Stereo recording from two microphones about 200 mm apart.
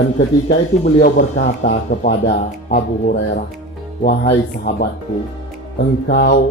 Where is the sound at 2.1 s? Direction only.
55° left (ahead or behind).